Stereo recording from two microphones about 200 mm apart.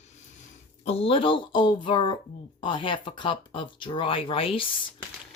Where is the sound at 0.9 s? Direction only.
30° left (ahead or behind).